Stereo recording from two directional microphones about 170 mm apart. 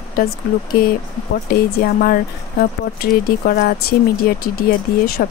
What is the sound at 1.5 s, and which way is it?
Speech, 65° left (ahead or behind).